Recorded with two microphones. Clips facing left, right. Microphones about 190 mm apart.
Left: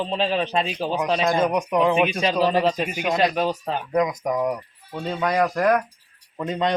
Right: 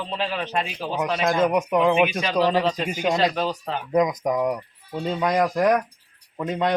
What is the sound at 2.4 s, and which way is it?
Speech, 15° left (ahead or behind).